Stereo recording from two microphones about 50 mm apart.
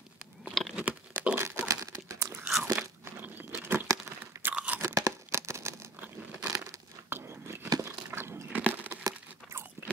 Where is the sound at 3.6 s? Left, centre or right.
Right.